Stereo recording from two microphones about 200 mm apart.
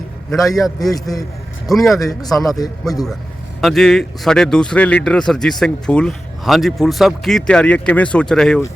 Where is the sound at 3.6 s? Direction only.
Centre (ahead or behind).